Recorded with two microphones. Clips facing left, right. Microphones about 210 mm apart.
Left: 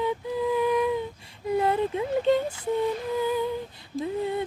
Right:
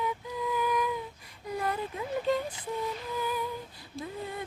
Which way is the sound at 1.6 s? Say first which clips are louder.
Left 8 dB; 25° left (ahead or behind).